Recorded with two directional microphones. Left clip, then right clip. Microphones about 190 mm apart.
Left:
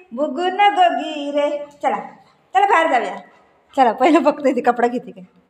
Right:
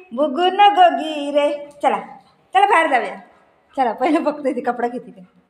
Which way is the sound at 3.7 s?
35° left (ahead or behind).